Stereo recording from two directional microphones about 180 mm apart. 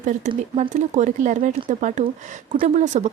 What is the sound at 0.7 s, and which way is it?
Speech, 40° right (ahead or behind).